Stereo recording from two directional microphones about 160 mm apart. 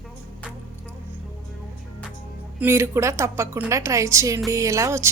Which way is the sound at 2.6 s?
15° right (ahead or behind).